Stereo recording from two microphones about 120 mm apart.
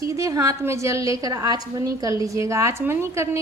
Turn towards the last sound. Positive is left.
turn(degrees=-20)  # may be behind; listen again after turning